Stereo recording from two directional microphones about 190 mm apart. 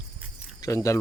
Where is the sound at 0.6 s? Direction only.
15° left (ahead or behind).